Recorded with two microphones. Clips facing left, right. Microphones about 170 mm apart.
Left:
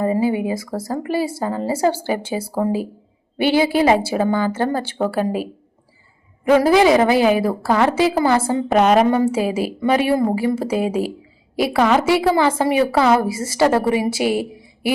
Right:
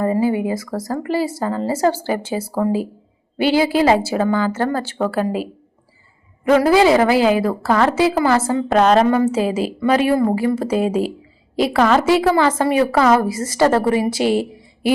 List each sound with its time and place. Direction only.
0.0 s a woman's voice: 20° left (ahead or behind)
6.6 s a woman's voice: 20° left (ahead or behind)
10.6 s a woman's voice: 10° left (ahead or behind)